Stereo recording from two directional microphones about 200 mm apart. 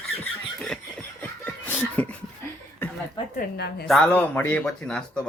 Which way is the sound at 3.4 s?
55° left (ahead or behind).